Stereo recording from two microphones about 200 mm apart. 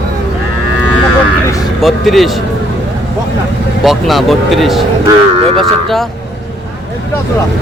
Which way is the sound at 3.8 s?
Centre (ahead or behind).